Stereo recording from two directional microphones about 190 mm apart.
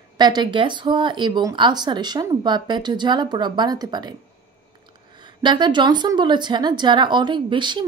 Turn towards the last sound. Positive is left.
turn(degrees=-25)  # may be behind; listen again after turning